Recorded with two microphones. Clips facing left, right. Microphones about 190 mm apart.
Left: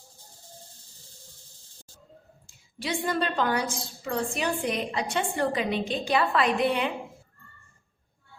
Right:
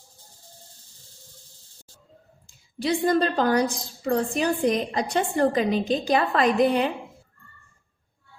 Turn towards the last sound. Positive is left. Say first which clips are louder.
# right 5 dB
turn(degrees=-40)  # may be behind; listen again after turning